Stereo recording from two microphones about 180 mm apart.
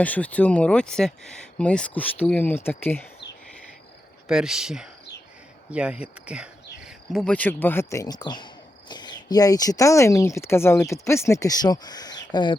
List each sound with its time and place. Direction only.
0.0 s speech: 10° left (ahead or behind)
4.3 s speech: 5° right (ahead or behind); by 12.5 s 25° left (ahead or behind)